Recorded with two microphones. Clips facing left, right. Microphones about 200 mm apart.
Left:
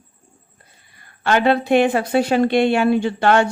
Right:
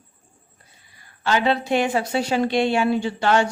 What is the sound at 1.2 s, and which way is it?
Speech, 55° left (ahead or behind).